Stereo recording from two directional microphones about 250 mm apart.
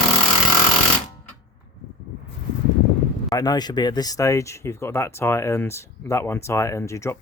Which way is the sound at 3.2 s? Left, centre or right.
Centre.